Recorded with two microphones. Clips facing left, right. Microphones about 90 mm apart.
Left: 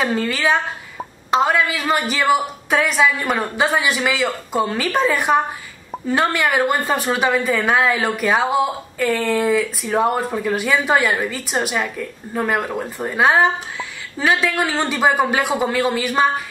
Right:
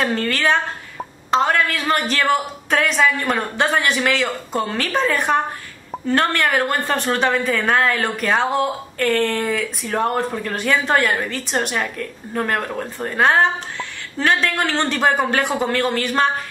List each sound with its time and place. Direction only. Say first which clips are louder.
0.0 s a woman's voice: even; 5° left (ahead or behind)